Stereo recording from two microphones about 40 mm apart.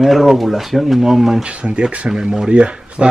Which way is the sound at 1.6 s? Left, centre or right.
Right.